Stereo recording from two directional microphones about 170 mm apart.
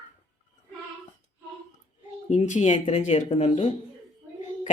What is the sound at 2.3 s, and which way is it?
Speech, 45° left (ahead or behind).